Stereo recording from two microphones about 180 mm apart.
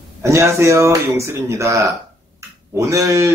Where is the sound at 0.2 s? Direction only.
15° right (ahead or behind).